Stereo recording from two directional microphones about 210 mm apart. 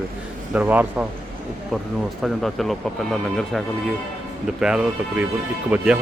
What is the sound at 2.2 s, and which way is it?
Speech, centre (ahead or behind).